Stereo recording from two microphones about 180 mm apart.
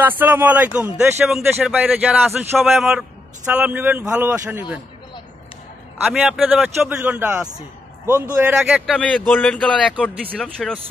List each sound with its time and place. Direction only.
0.2 s a man's voice: 10° right (ahead or behind)
6.0 s a man's voice: centre (ahead or behind)
8.9 s a man's voice: 5° left (ahead or behind)